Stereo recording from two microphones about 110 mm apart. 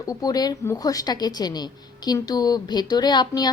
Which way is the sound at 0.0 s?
35° left (ahead or behind).